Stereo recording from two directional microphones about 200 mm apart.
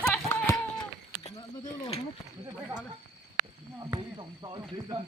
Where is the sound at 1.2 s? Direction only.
30° left (ahead or behind).